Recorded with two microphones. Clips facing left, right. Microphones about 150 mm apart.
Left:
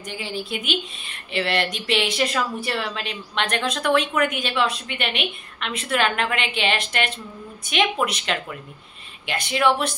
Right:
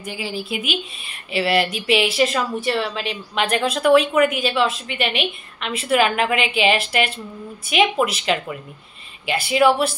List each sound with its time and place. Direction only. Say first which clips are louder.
0.0 s speech: right 2 dB; 5° right (ahead or behind)